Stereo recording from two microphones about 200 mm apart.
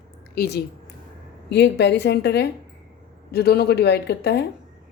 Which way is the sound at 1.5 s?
60° left (ahead or behind).